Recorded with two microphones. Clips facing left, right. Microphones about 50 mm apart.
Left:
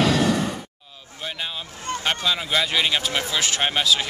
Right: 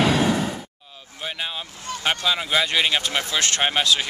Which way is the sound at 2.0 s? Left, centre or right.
Centre.